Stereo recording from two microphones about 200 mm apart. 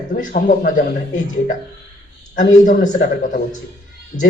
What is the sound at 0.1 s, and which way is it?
A woman's voice, 40° left (ahead or behind).